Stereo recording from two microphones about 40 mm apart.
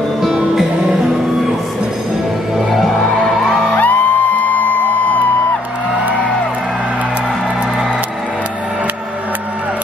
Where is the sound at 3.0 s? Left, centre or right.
Left.